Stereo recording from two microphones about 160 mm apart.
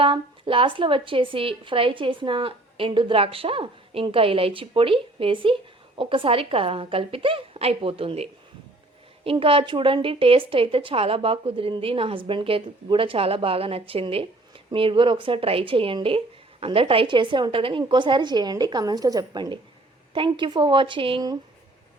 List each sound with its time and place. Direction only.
0.0 s speech: 35° right (ahead or behind)